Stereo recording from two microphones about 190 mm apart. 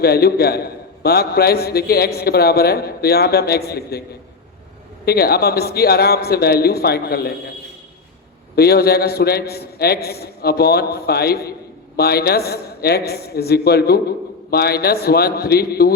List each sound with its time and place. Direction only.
0.0 s a man's voice: 55° left (ahead or behind)
5.0 s a man's voice: 55° left (ahead or behind)
8.5 s a man's voice: 55° left (ahead or behind)